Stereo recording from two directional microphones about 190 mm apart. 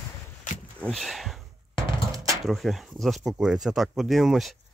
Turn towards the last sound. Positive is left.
turn(degrees=0)  # may be behind; listen again after turning